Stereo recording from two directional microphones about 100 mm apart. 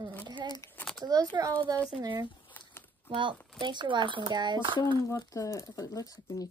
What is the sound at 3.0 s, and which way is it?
Speech, 55° right (ahead or behind).